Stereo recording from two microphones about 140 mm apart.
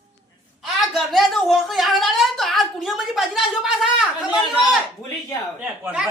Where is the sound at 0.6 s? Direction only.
Centre (ahead or behind).